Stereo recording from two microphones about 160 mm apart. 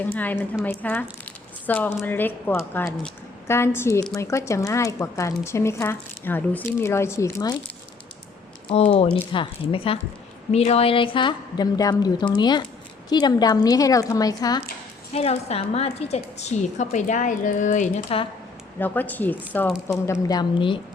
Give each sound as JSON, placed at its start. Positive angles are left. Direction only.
{"t": 0.0, "sound": "speech", "side_deg": 10}
{"t": 1.2, "sound": "squish", "side_deg": 10}
{"t": 2.0, "sound": "speech", "side_deg": 10}
{"t": 3.4, "sound": "a woman's voice", "side_deg": 15}
{"t": 8.7, "sound": "a woman's voice", "side_deg": 40}
{"t": 15.1, "sound": "a woman's voice", "side_deg": 40}
{"t": 18.8, "sound": "a woman's voice", "side_deg": 10}